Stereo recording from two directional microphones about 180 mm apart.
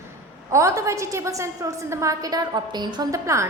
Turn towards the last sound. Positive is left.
turn(degrees=-15)  # may be behind; listen again after turning